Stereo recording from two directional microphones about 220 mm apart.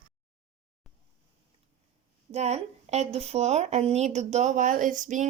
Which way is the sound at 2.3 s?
30° right (ahead or behind).